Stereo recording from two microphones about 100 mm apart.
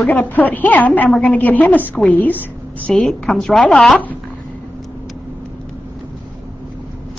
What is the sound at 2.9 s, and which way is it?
Speech, 5° left (ahead or behind).